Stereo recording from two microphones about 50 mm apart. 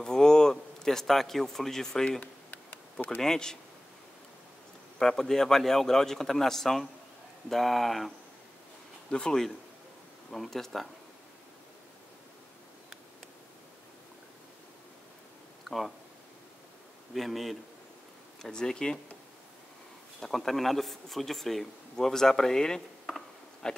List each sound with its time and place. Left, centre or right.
0.0 s a man's voice: centre
2.1 s a sound: left
3.2 s a man's voice: centre
4.9 s a man's voice: centre
9.1 s a man's voice: centre
15.7 s a sound: centre
17.1 s speech: centre
18.4 s a man's voice: centre
20.2 s speech: centre